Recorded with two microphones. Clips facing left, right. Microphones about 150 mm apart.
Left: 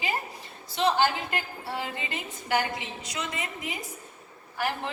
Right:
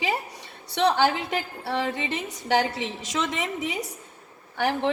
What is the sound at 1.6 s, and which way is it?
A woman's voice, 80° right.